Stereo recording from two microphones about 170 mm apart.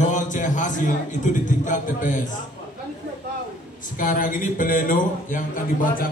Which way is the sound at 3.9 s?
50° left (ahead or behind).